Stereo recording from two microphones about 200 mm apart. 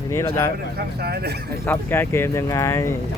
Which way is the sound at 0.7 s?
50° right (ahead or behind).